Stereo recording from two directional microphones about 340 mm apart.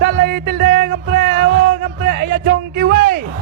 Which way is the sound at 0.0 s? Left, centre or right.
Right.